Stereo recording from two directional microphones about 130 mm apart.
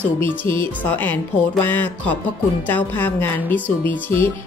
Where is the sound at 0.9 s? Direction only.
15° left (ahead or behind).